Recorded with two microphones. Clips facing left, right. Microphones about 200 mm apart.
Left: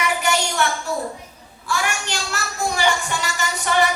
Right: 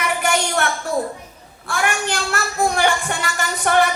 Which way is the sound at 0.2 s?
55° right (ahead or behind).